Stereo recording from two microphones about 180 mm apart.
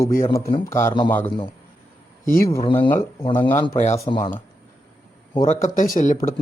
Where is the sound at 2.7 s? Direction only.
10° left (ahead or behind).